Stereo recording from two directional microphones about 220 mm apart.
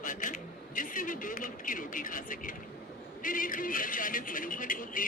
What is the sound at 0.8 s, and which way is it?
A man's voice, 40° left (ahead or behind).